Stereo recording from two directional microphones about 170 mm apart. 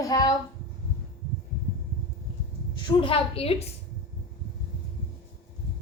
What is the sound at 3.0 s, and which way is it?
Speech, 35° left (ahead or behind).